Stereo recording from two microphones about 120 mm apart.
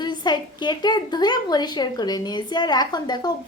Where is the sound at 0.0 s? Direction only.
35° left (ahead or behind).